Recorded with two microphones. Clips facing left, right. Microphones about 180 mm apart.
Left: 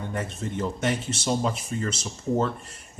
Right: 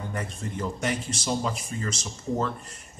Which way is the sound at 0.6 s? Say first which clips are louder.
Left 2 dB; 25° left (ahead or behind).